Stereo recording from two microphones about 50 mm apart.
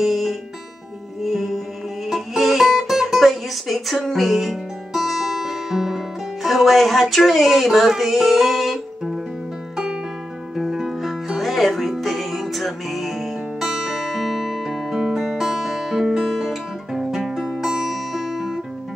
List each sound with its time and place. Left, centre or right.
0.0 s music: centre
10.5 s music: centre